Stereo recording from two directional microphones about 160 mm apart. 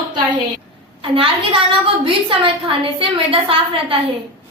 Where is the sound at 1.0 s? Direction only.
35° right (ahead or behind).